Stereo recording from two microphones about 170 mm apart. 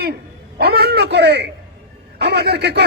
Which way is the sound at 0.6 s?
70° right (ahead or behind).